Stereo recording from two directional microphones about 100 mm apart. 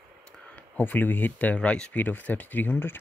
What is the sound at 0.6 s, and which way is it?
Speech, 15° left (ahead or behind).